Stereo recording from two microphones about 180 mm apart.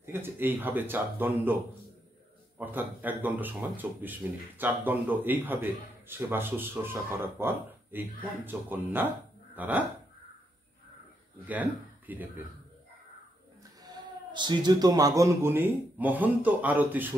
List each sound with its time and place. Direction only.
0.0 s speech: 10° right (ahead or behind)
2.6 s speech: 10° right (ahead or behind)
11.4 s speech: 10° right (ahead or behind)
13.8 s speech: 25° right (ahead or behind); by 17.1 s 10° right (ahead or behind)